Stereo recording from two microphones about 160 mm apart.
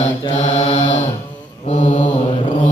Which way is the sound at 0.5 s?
40° left (ahead or behind).